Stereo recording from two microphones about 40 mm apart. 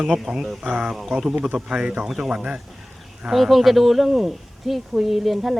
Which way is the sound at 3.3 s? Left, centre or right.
Centre.